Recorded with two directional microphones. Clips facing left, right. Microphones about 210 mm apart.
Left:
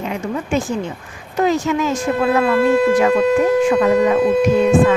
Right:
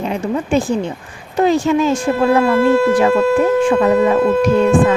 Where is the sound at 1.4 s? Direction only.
30° right (ahead or behind).